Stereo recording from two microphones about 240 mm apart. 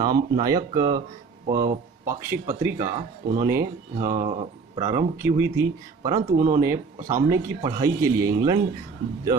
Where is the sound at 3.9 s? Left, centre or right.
Centre.